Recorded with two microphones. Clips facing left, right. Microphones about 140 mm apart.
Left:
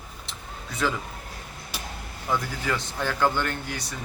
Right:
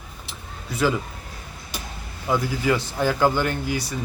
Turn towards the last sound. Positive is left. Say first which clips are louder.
# right 6 dB
turn(degrees=-5)  # may be behind; listen again after turning